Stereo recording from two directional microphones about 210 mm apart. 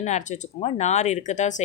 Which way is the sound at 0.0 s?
35° left (ahead or behind).